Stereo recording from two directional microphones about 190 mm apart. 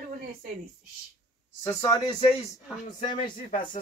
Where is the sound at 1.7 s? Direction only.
20° left (ahead or behind).